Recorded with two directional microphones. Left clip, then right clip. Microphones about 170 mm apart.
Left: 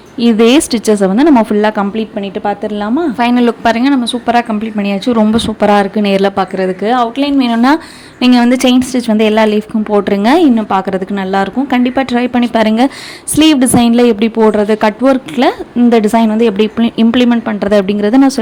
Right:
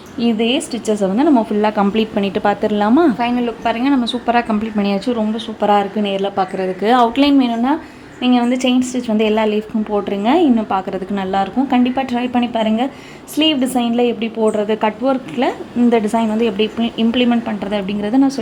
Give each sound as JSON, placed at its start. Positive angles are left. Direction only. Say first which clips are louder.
{"t": 0.2, "sound": "a woman's voice", "louder": "left 9 dB", "side_deg": 35}
{"t": 1.0, "sound": "a woman's voice", "louder": "left 4 dB", "side_deg": 25}
{"t": 1.9, "sound": "a woman's voice", "louder": "right 1 dB", "side_deg": 0}
{"t": 3.2, "sound": "a woman's voice", "louder": "left 7 dB", "side_deg": 30}
{"t": 5.1, "sound": "speech", "louder": "left 9 dB", "side_deg": 45}
{"t": 5.5, "sound": "a woman's voice", "louder": "left 3 dB", "side_deg": 30}
{"t": 6.8, "sound": "a woman's voice", "louder": "right 1 dB", "side_deg": 5}
{"t": 7.5, "sound": "a woman's voice", "louder": "left 7 dB", "side_deg": 30}